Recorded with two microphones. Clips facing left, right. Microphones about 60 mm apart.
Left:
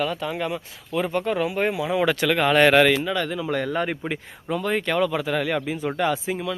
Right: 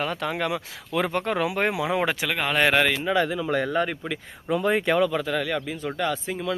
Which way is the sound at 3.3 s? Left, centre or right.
Centre.